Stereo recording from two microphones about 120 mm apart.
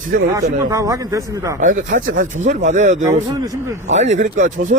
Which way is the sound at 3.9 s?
70° right (ahead or behind).